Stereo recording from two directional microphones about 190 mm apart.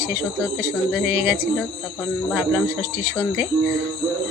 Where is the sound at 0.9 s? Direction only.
5° right (ahead or behind).